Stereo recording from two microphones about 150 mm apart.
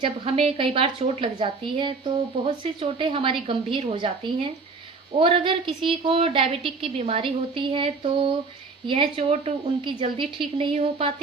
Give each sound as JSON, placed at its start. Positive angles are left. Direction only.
{"t": 0.0, "sound": "a woman's voice", "side_deg": -40}